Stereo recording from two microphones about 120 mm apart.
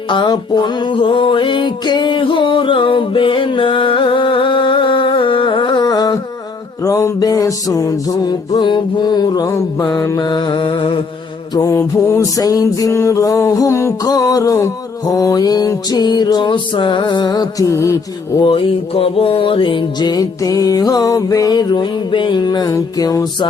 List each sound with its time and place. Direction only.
0.1 s music: 40° left (ahead or behind)
11.5 s music: 30° left (ahead or behind)
18.4 s music: 50° left (ahead or behind); by 23.5 s 30° left (ahead or behind)